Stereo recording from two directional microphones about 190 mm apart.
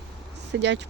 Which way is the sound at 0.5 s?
75° right (ahead or behind).